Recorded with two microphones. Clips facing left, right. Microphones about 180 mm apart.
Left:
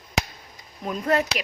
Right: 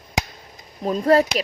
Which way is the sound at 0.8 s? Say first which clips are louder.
Right 7 dB; 35° right (ahead or behind).